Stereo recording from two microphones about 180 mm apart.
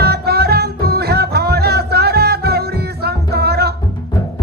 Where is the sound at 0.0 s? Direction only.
60° right (ahead or behind).